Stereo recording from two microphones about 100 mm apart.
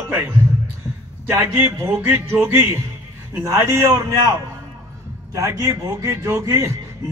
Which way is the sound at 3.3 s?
30° right (ahead or behind).